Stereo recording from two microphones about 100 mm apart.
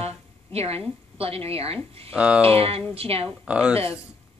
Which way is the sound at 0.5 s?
90° right.